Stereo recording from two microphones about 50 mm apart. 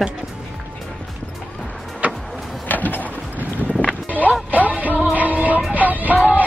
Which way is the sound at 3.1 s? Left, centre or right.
Right.